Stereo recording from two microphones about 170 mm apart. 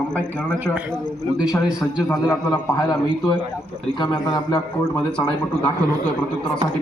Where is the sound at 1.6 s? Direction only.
20° left (ahead or behind).